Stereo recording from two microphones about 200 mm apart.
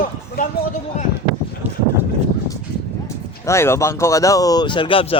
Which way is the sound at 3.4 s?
15° left (ahead or behind).